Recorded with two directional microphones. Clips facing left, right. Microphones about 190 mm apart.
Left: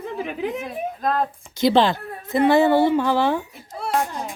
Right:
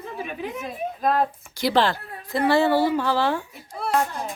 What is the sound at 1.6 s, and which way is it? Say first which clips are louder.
A woman's voice: left 4 dB; 20° left (ahead or behind).